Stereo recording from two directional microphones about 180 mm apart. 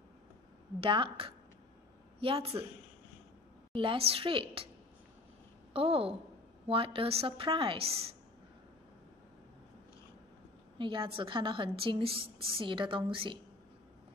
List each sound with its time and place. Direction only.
0.7 s a woman's voice: 30° right (ahead or behind)
3.7 s a woman's voice: 30° right (ahead or behind)
5.7 s a woman's voice: 30° right (ahead or behind)
10.8 s a woman's voice: 30° right (ahead or behind)